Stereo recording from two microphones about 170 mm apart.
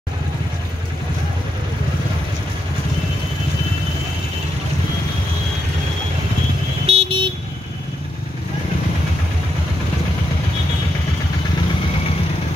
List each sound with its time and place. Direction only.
6.9 s vehicle: 35° right (ahead or behind)